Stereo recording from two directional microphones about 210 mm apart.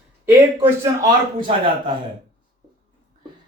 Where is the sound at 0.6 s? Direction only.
20° right (ahead or behind).